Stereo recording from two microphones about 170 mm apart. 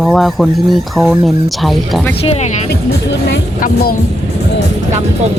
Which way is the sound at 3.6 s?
60° left (ahead or behind).